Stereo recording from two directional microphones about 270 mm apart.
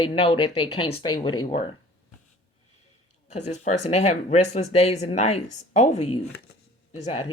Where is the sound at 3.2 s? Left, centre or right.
Left.